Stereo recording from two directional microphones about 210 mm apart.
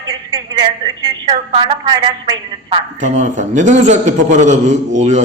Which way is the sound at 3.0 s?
35° right (ahead or behind).